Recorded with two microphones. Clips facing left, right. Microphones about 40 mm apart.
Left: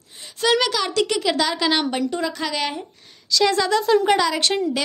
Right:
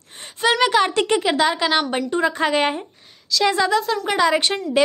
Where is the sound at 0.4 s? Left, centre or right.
Centre.